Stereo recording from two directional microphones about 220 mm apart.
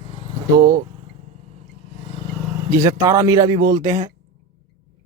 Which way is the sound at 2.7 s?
15° right (ahead or behind).